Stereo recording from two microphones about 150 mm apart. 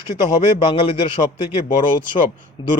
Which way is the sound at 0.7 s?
35° left (ahead or behind).